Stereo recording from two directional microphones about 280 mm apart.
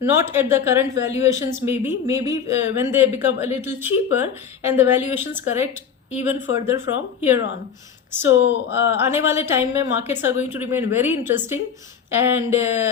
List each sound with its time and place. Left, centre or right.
0.0 s speech: centre
8.4 s speech: left
8.9 s speech: centre